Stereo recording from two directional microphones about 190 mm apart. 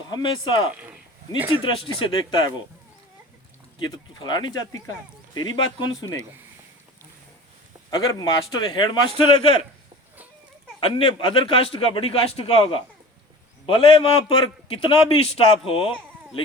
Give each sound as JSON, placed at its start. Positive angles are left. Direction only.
{"t": 0.1, "sound": "a man's voice", "side_deg": 25}
{"t": 1.4, "sound": "speech", "side_deg": -10}
{"t": 2.0, "sound": "a man's voice", "side_deg": 25}
{"t": 3.8, "sound": "a man's voice", "side_deg": 25}
{"t": 7.9, "sound": "a man's voice", "side_deg": 20}
{"t": 10.8, "sound": "a man's voice", "side_deg": 30}